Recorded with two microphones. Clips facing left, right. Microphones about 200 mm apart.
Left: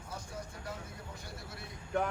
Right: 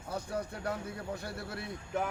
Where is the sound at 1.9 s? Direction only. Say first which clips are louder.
Left 1 dB; centre (ahead or behind).